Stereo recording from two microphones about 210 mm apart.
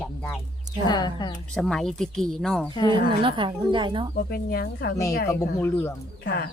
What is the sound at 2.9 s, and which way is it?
Speech, 25° right (ahead or behind).